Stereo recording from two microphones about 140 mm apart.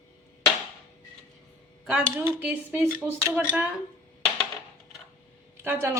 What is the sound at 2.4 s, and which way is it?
Speech, 10° right (ahead or behind).